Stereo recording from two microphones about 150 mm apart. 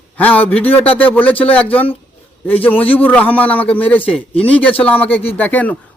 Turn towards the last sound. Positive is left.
turn(degrees=10)  # may be behind; listen again after turning